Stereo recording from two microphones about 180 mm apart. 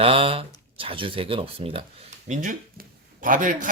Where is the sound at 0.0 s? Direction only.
30° right (ahead or behind).